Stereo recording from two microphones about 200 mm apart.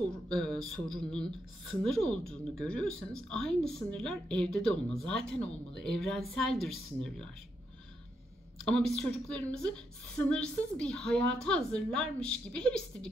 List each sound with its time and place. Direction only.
0.3 s a woman's voice: centre (ahead or behind)
8.6 s a woman's voice: 5° left (ahead or behind)